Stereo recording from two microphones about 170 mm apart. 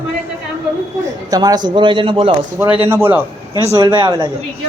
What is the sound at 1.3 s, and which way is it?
Speech, 20° right (ahead or behind).